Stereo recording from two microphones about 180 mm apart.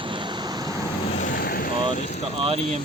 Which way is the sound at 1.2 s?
50° left (ahead or behind).